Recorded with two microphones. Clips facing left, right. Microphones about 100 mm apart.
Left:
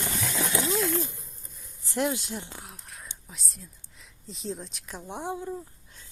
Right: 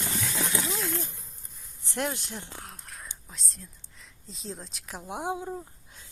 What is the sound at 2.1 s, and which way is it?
Speech, 15° left (ahead or behind).